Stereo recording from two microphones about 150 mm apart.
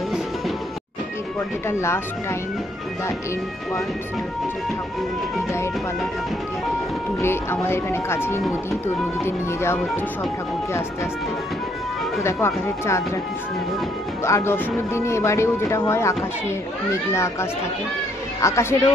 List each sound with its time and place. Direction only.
1.7 s speech: 15° left (ahead or behind)
7.2 s speech: 15° left (ahead or behind)
12.2 s speech: 15° left (ahead or behind)
14.2 s speech: 15° left (ahead or behind)